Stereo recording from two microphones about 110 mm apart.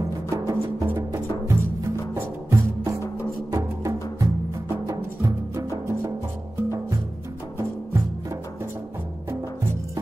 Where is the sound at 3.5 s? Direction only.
30° right (ahead or behind).